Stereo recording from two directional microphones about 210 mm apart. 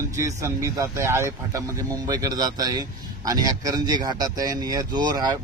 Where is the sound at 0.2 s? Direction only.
15° right (ahead or behind).